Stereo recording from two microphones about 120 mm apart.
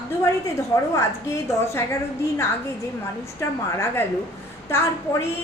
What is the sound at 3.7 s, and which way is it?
A woman's voice, 20° left (ahead or behind).